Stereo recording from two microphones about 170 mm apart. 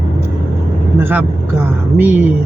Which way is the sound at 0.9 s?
10° right (ahead or behind).